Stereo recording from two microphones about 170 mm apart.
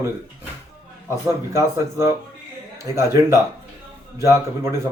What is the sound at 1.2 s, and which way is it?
Speech, 15° right (ahead or behind).